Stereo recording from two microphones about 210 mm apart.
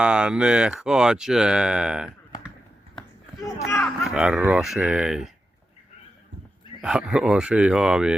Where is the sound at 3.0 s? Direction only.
20° left (ahead or behind).